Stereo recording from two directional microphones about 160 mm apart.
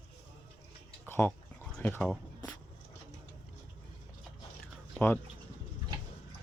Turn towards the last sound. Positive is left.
turn(degrees=10)  # may be behind; listen again after turning